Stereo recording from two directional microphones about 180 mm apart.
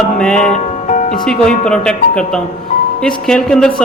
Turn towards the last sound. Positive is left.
turn(degrees=5)  # may be behind; listen again after turning